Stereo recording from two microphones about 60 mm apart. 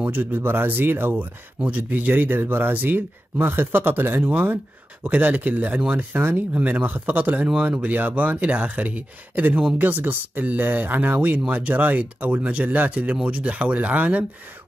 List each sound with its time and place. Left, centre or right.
0.0 s speech: right